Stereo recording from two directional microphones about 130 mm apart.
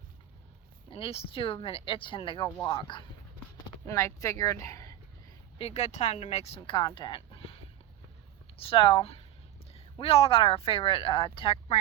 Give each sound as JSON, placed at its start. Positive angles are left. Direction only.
{"t": 0.9, "sound": "speech", "side_deg": 45}
{"t": 3.8, "sound": "speech", "side_deg": 25}
{"t": 5.5, "sound": "speech", "side_deg": 55}
{"t": 6.7, "sound": "speech", "side_deg": 35}